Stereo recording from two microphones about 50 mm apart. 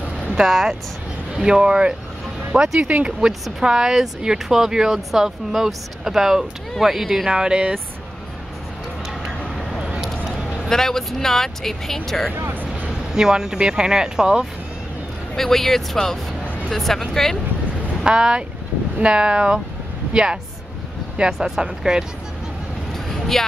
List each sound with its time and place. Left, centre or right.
0.3 s speech: centre
1.3 s speech: centre
2.8 s speech: right
3.6 s speech: centre
7.2 s speech: centre
9.8 s a sound: centre
10.0 s a sound: centre
10.4 s vehicle: centre
10.7 s speech: centre
12.9 s speech: centre
15.3 s speech: centre
18.0 s speech: centre
22.9 s vehicle: centre